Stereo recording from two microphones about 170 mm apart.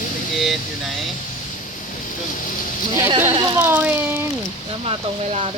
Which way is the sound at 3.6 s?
10° right (ahead or behind).